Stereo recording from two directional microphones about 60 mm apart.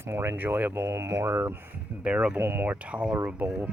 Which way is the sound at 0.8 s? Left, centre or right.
Right.